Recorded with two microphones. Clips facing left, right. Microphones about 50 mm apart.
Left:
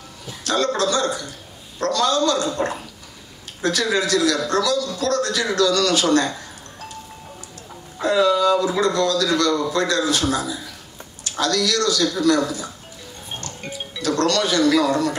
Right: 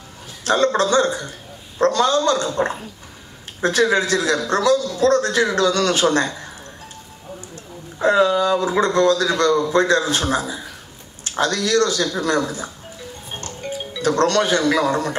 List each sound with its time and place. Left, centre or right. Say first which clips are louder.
0.4 s a man's voice: right 4 dB; right
8.0 s a man's voice: right 1 dB; right
14.0 s a man's voice: right 3 dB; right